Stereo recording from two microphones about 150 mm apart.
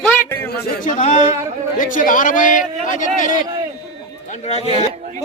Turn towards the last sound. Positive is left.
turn(degrees=-50)  # may be behind; listen again after turning